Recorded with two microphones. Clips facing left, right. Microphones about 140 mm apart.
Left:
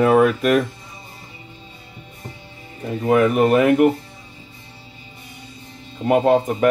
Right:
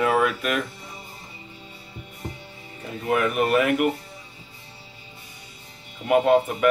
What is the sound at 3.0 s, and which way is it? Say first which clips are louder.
Speech: left 7 dB; 35° left (ahead or behind).